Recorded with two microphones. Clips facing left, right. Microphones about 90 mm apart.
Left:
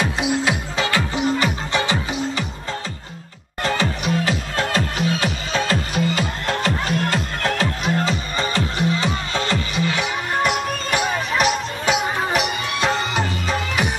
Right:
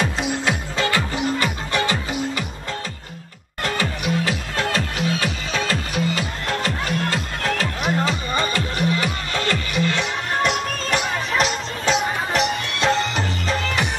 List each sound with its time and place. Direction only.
0.0 s music: 15° left (ahead or behind)
3.7 s music: 25° left (ahead or behind); by 13.8 s 5° left (ahead or behind)